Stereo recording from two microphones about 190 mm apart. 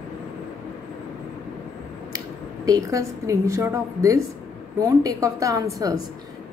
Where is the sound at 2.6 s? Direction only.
20° right (ahead or behind).